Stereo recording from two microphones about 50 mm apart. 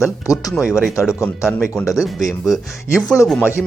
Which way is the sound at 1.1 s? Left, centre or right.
Left.